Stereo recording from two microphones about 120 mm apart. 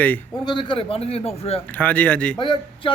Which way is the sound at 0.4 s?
40° left (ahead or behind).